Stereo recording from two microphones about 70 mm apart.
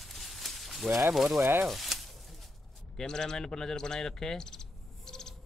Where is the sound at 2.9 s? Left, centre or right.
Centre.